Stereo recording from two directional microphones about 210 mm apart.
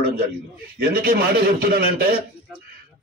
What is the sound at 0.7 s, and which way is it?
Speech, 45° right (ahead or behind).